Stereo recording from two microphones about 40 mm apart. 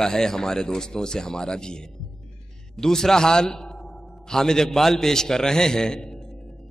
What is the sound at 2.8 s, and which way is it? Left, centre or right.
A man's voice, centre.